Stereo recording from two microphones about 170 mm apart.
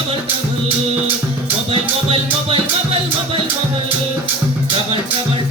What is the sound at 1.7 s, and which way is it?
Music, 35° right (ahead or behind).